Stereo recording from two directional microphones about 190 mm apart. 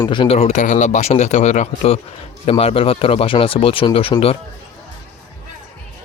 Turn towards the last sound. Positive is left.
turn(degrees=30)  # may be behind; listen again after turning